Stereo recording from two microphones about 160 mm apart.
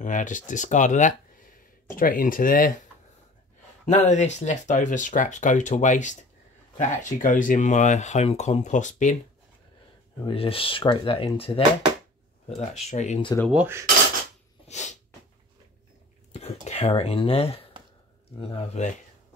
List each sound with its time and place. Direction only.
0.0 s speech: 50° left (ahead or behind)
2.0 s speech: 60° left (ahead or behind)
3.8 s speech: 45° left (ahead or behind)
10.2 s speech: 35° left (ahead or behind)
12.9 s speech: 45° left (ahead or behind)
13.5 s cutlery: 10° right (ahead or behind)
14.7 s sneeze: 45° left (ahead or behind)
16.3 s speech: 40° left (ahead or behind)